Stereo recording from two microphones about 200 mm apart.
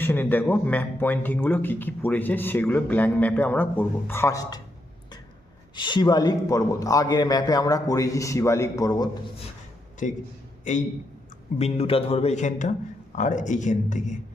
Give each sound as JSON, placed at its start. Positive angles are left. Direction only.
{"t": 0.0, "sound": "speech", "side_deg": 10}
{"t": 5.7, "sound": "speech", "side_deg": 25}
{"t": 10.0, "sound": "a man's voice", "side_deg": 40}